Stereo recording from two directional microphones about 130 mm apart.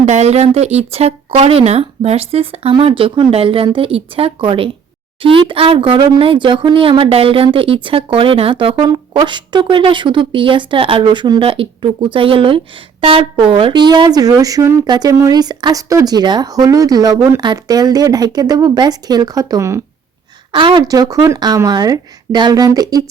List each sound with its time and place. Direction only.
0.0 s speech: 60° right (ahead or behind); by 19.8 s 25° right (ahead or behind)
20.5 s speech: 40° right (ahead or behind)